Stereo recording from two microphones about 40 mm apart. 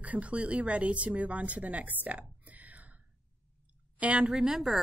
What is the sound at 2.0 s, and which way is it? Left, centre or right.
Whispering, right.